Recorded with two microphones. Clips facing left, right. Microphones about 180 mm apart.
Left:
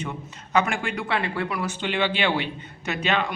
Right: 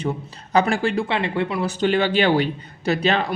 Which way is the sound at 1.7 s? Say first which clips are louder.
Right 9 dB; 40° right (ahead or behind).